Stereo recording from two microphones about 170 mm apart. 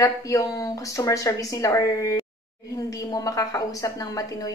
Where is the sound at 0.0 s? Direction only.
20° left (ahead or behind).